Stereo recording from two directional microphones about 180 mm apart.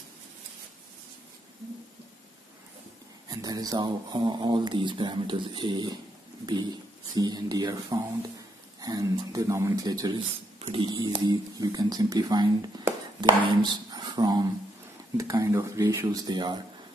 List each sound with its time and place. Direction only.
3.3 s speech: 20° right (ahead or behind)